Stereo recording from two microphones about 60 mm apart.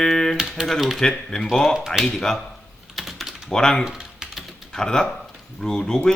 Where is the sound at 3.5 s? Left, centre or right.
Centre.